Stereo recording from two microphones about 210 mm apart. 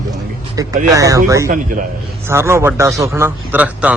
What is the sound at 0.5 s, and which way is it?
A man's voice, 15° right (ahead or behind).